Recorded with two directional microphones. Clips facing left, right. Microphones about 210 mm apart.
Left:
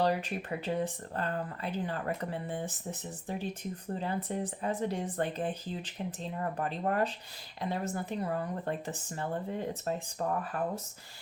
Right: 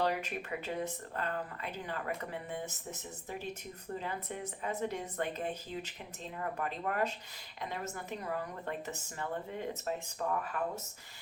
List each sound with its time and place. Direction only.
0.0 s speech: 30° left (ahead or behind)